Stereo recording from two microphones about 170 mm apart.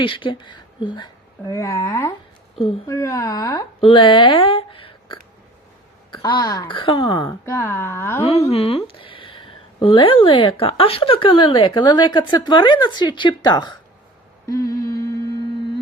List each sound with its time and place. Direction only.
0.0 s speech: 30° left (ahead or behind)
1.5 s speech: 15° left (ahead or behind)
7.5 s speech: 15° left (ahead or behind)
8.2 s speech: 35° left (ahead or behind)
14.4 s humming: 20° left (ahead or behind)